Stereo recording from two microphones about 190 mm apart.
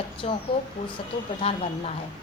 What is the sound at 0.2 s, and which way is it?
Speech, 35° left (ahead or behind).